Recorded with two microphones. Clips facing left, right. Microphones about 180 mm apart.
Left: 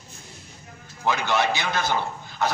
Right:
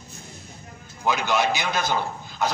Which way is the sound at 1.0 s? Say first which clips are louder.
Right 1 dB; 15° right (ahead or behind).